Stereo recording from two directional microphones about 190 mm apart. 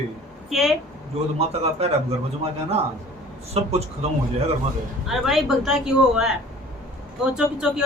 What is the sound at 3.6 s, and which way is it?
Speech, 35° right (ahead or behind).